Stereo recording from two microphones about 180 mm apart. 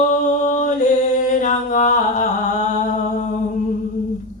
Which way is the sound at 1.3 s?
45° left (ahead or behind).